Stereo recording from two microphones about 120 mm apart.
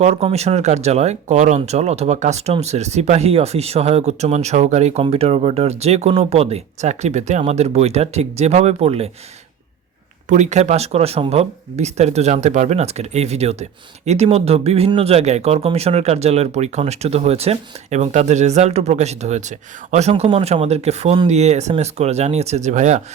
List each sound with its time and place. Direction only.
0.0 s speech: 60° right (ahead or behind)
5.0 s speech: 55° right (ahead or behind)
10.2 s speech: 75° right (ahead or behind)